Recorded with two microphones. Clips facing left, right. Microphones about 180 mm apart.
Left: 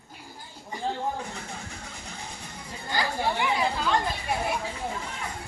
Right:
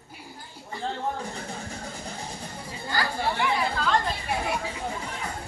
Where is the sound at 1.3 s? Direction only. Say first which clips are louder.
Right 3 dB; 35° right (ahead or behind).